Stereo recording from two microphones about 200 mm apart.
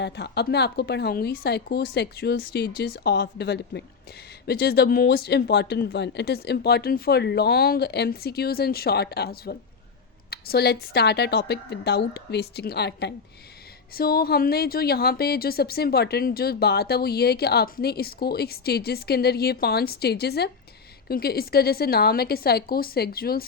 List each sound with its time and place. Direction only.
0.0 s speech: 55° left (ahead or behind)